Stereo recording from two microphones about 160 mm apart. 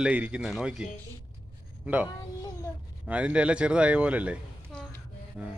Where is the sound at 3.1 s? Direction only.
10° right (ahead or behind).